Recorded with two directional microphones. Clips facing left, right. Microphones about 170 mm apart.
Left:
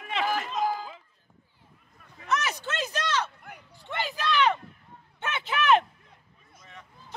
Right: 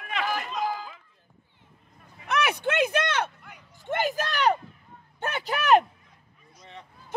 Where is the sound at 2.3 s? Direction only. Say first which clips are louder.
Right 4 dB; 60° right (ahead or behind).